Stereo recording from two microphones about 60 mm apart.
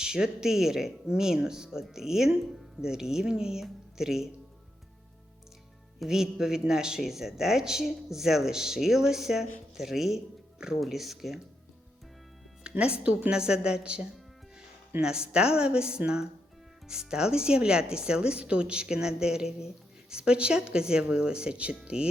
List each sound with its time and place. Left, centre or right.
0.0 s speech: centre
6.0 s speech: centre
12.8 s speech: centre